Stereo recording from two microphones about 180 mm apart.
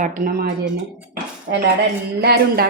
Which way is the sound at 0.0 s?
50° right (ahead or behind).